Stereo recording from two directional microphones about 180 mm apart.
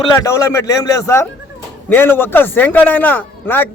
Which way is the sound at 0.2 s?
15° left (ahead or behind).